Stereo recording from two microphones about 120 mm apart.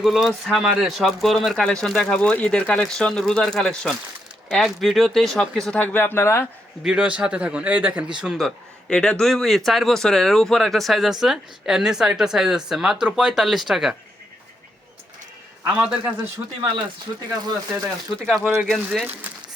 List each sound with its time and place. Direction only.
0.0 s a man's voice: 5° right (ahead or behind); by 6.5 s 20° left (ahead or behind)
6.8 s a man's voice: 10° right (ahead or behind)
15.6 s a man's voice: 10° right (ahead or behind)
16.6 s speech: 45° right (ahead or behind)
18.3 s a man's voice: centre (ahead or behind)
18.9 s a man's voice: 10° right (ahead or behind)